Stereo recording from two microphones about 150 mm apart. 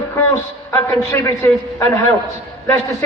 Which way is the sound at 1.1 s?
15° left (ahead or behind).